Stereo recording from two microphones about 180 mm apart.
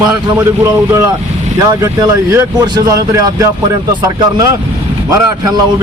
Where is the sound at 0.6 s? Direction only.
15° right (ahead or behind).